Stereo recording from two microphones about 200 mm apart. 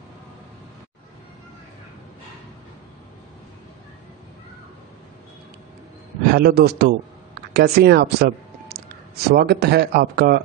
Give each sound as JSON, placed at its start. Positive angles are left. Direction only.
{"t": 6.3, "sound": "speech", "side_deg": -50}